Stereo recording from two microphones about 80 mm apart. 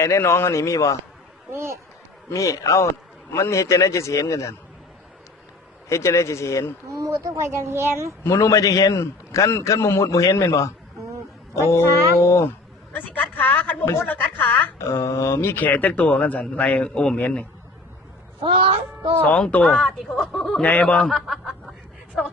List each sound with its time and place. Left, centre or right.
0.0 s a man's voice: left
1.5 s a child's voice: right
2.3 s a man's voice: left
5.9 s a man's voice: left
6.8 s a child's voice: right
8.2 s a man's voice: left; by 17.4 s centre
19.2 s speech: centre
20.6 s speech: centre
21.1 s speech: centre